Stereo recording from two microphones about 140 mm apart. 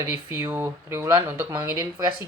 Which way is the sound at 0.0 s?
15° right (ahead or behind).